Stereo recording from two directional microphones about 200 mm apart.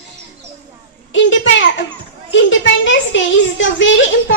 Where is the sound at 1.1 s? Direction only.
70° left (ahead or behind).